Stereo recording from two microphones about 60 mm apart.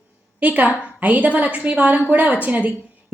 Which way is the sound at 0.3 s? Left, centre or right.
Right.